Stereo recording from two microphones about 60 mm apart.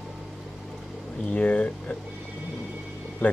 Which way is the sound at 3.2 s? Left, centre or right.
Left.